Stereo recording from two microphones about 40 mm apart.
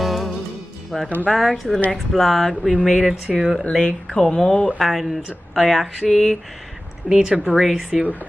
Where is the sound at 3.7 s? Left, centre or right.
Left.